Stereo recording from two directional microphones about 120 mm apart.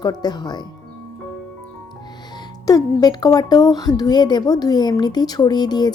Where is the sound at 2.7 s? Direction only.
30° left (ahead or behind).